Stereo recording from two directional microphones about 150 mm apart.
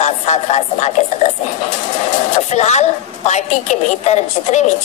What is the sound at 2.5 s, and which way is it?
A woman's voice, 45° left (ahead or behind).